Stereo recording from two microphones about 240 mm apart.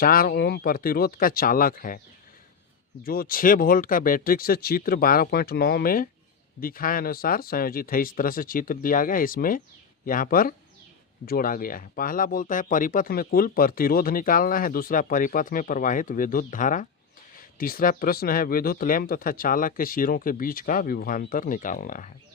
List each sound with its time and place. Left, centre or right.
0.0 s speech: left
3.0 s speech: left